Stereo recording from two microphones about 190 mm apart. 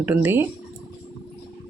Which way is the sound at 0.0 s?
10° right (ahead or behind).